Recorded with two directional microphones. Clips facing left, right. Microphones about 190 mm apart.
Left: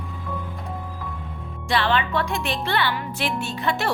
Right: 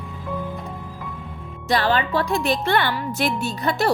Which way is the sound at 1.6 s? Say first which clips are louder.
Right 2 dB; 40° right (ahead or behind).